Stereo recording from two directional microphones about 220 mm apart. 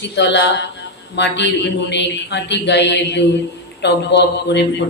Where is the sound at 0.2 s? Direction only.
50° left (ahead or behind).